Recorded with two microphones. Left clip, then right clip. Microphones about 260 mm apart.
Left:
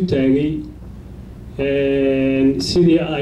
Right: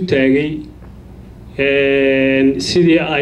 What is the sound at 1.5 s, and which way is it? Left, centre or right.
Speech, right.